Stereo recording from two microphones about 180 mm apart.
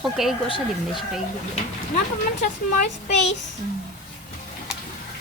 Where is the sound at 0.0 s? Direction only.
Centre (ahead or behind).